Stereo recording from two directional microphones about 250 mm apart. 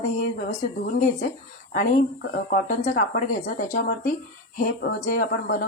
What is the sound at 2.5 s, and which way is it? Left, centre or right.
Speech, left.